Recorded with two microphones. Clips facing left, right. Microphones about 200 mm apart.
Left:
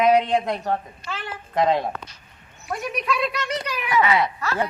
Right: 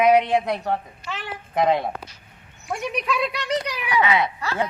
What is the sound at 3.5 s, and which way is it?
A woman's voice, 15° right (ahead or behind).